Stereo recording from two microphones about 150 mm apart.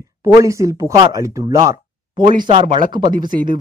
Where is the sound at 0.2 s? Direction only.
20° right (ahead or behind).